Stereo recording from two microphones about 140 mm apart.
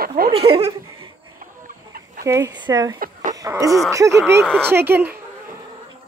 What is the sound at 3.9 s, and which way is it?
Speech, 20° right (ahead or behind).